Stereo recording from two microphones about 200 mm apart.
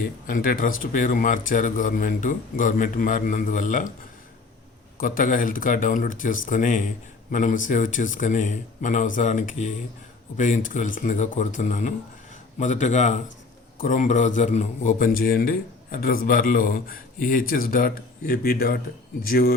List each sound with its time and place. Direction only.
0.3 s speech: 45° left (ahead or behind)
4.9 s a man's voice: 45° left (ahead or behind)